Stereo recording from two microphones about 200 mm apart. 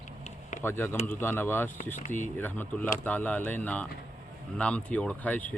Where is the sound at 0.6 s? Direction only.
10° left (ahead or behind).